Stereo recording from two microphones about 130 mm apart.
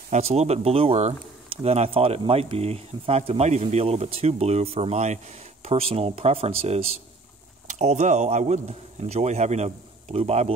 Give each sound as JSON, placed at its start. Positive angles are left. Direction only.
{"t": 0.1, "sound": "speech", "side_deg": -55}
{"t": 7.6, "sound": "speech", "side_deg": -60}